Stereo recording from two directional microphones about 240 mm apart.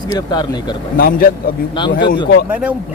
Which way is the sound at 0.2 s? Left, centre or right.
Centre.